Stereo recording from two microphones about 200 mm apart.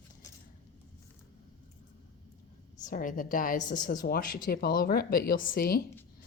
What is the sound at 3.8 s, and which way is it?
A woman's voice, 45° left (ahead or behind).